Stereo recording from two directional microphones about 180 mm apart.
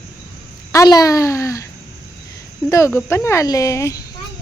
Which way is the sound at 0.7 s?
20° left (ahead or behind).